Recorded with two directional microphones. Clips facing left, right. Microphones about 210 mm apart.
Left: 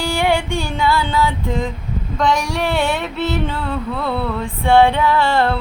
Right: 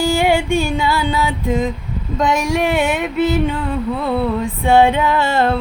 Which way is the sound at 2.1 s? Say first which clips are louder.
Right 2 dB; 20° right (ahead or behind).